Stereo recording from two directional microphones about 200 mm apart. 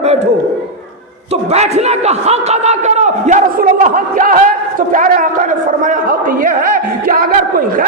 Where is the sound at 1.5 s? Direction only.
35° right (ahead or behind).